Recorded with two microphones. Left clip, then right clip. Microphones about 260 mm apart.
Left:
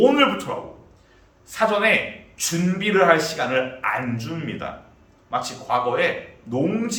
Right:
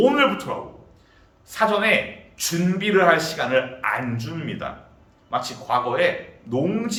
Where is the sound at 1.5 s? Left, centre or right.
Centre.